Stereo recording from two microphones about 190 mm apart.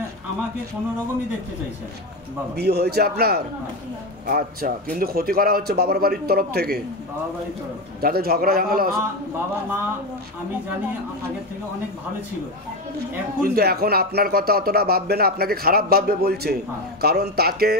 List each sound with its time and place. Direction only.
2.5 s a man's voice: 55° right (ahead or behind)
8.0 s a man's voice: 55° right (ahead or behind)
13.4 s a man's voice: 55° right (ahead or behind)